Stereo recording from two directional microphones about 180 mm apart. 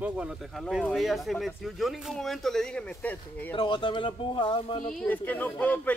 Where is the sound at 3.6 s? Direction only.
25° left (ahead or behind).